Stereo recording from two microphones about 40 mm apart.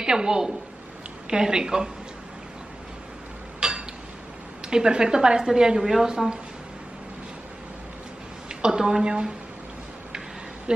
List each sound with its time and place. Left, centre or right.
0.0 s a woman's voice: centre
3.6 s a sound: right
4.6 s a woman's voice: centre
8.5 s a woman's voice: centre